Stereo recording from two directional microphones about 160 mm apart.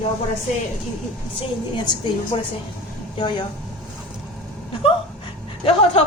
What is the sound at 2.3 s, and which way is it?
Speech, 35° left (ahead or behind).